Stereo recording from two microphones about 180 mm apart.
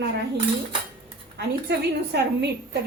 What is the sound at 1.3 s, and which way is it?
A woman's voice, 65° right (ahead or behind).